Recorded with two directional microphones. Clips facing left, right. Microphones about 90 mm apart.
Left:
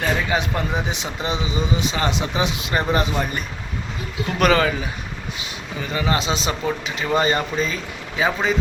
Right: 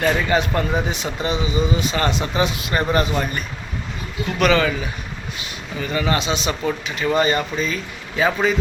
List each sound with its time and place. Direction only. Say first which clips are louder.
0.0 s speech: right 3 dB; 5° left (ahead or behind)
4.4 s speech: even; 40° left (ahead or behind)
5.9 s speech: right 1 dB; 20° left (ahead or behind)
8.2 s a man's voice: right 2 dB; 15° left (ahead or behind)